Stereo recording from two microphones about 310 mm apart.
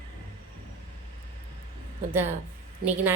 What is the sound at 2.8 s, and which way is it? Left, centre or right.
Speech, right.